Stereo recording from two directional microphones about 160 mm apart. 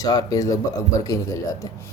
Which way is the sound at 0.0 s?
25° left (ahead or behind).